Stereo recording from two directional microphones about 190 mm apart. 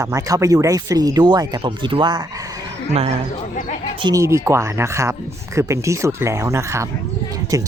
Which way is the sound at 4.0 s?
20° right (ahead or behind).